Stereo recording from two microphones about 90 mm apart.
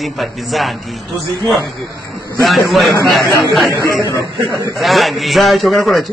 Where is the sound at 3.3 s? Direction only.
35° left (ahead or behind).